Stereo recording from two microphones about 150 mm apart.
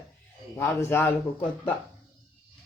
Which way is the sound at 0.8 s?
15° left (ahead or behind).